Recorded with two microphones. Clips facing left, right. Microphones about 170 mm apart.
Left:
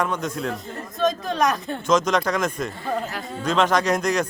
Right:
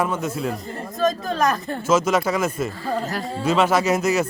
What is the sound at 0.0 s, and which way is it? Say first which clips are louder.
A man's voice: right 2 dB; 5° right (ahead or behind).